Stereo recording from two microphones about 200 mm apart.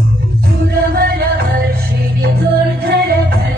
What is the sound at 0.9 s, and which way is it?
Music, 50° right (ahead or behind).